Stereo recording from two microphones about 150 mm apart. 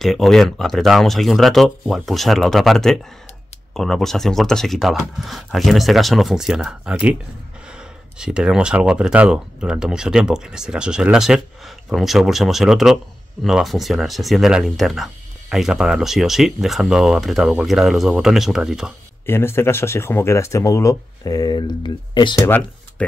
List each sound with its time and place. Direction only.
0.0 s speech: centre (ahead or behind)
19.2 s speech: 15° left (ahead or behind); by 22.5 s 30° left (ahead or behind)